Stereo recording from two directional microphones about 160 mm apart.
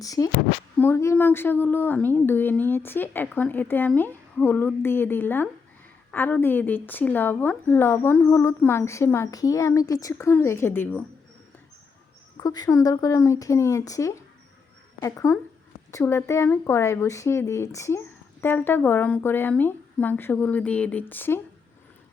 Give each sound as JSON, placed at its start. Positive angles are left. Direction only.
{"t": 0.0, "sound": "speech", "side_deg": 20}
{"t": 12.4, "sound": "speech", "side_deg": 25}